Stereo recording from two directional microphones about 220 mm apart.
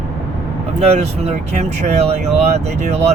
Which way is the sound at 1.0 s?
30° right (ahead or behind).